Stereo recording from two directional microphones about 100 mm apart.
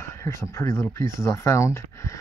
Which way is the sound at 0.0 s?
30° left (ahead or behind).